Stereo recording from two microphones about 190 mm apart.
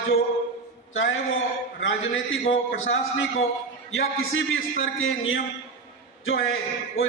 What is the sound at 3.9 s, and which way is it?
A man's voice, 90° left.